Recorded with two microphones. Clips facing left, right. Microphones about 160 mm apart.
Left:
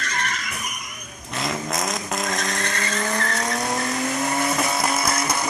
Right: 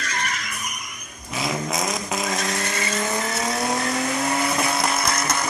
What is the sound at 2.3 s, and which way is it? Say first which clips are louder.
Vehicle: right 1 dB; 5° right (ahead or behind).